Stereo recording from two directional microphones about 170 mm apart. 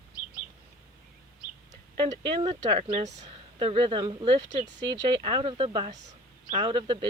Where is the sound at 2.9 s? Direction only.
45° right (ahead or behind).